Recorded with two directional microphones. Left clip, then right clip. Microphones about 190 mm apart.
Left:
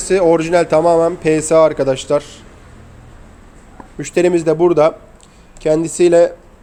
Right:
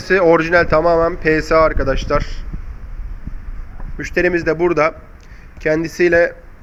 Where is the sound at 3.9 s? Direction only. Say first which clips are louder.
Left 2 dB; 15° left (ahead or behind).